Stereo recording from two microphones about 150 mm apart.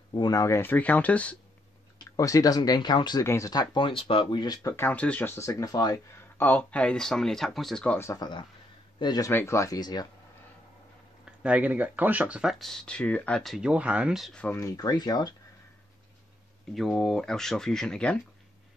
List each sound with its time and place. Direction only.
0.1 s speech: 25° left (ahead or behind); by 1.3 s 10° left (ahead or behind)
2.1 s speech: 20° left (ahead or behind)
6.1 s speech: 15° left (ahead or behind)
8.0 s speech: 25° left (ahead or behind)
11.4 s speech: 10° right (ahead or behind)
14.4 s speech: 20° left (ahead or behind)
16.7 s speech: centre (ahead or behind)